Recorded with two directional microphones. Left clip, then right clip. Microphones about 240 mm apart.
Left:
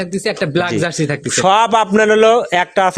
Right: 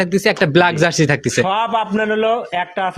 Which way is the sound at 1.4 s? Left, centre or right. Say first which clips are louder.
Left 8 dB; left.